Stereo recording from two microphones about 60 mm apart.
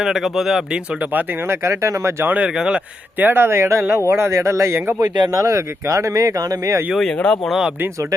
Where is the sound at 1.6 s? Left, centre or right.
Right.